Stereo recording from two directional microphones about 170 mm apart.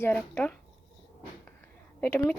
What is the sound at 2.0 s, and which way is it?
Speech, 10° left (ahead or behind).